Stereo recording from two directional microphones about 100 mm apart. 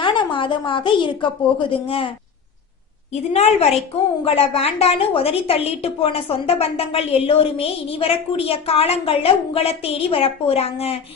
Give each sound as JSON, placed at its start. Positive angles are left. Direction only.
{"t": 0.0, "sound": "a woman's voice", "side_deg": 55}
{"t": 3.1, "sound": "a woman's voice", "side_deg": 90}
{"t": 4.2, "sound": "a woman's voice", "side_deg": 75}